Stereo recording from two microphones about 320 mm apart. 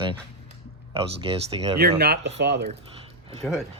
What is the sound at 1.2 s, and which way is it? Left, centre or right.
Speech, centre.